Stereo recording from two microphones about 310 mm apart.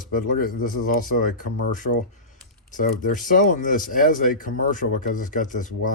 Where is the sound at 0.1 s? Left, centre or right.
Left.